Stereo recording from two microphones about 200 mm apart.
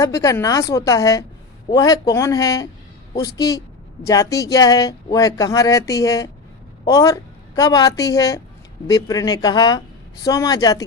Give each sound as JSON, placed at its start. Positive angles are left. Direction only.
{"t": 0.0, "sound": "a woman's voice", "side_deg": 15}